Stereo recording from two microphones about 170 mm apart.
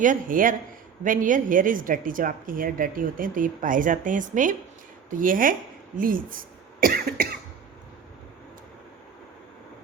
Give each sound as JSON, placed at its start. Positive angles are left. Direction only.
{"t": 0.0, "sound": "a woman's voice", "side_deg": -50}